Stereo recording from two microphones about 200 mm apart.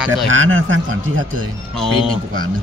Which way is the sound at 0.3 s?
80° right.